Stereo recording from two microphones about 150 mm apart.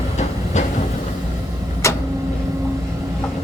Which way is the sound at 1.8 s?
20° left (ahead or behind).